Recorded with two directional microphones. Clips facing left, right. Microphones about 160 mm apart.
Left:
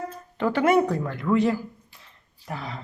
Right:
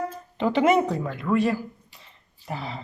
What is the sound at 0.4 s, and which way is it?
Speech, 10° right (ahead or behind).